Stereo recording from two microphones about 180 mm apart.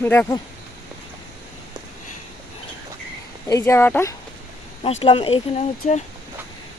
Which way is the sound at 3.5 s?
15° left (ahead or behind).